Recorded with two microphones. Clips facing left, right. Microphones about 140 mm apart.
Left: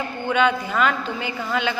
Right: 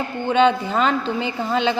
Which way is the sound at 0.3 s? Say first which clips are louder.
Right 4 dB; 25° right (ahead or behind).